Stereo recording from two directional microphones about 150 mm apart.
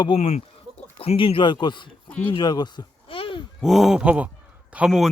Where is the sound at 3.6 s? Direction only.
Centre (ahead or behind).